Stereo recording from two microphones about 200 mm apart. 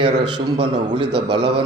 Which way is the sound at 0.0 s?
25° right (ahead or behind).